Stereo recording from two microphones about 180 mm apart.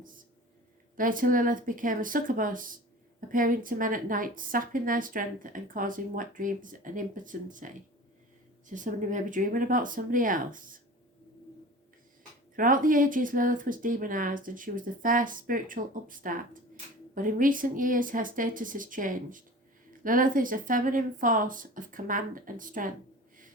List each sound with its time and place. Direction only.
0.9 s a woman's voice: 50° right (ahead or behind)
8.7 s a woman's voice: 45° right (ahead or behind)
12.5 s a woman's voice: 50° right (ahead or behind)